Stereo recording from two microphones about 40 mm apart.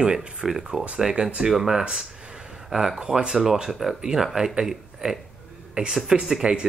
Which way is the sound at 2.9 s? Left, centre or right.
Right.